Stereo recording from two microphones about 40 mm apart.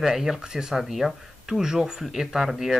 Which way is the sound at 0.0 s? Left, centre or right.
Centre.